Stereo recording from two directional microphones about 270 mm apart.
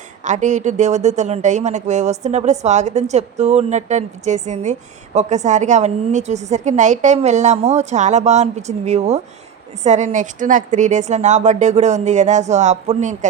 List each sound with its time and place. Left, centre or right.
0.3 s speech: right